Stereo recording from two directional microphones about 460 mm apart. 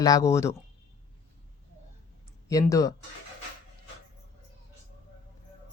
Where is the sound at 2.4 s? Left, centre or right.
Centre.